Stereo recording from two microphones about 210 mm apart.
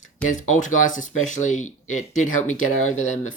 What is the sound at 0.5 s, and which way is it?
Speech, 35° left (ahead or behind).